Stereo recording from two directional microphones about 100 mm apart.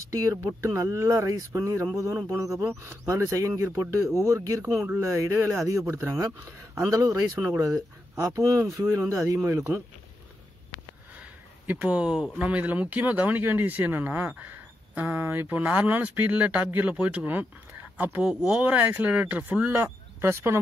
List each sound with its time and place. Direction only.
0.0 s speech: 35° right (ahead or behind)
11.6 s speech: 15° right (ahead or behind)